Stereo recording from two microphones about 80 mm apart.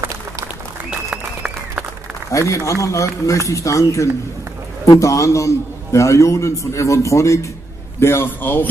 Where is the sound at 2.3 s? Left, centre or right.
Left.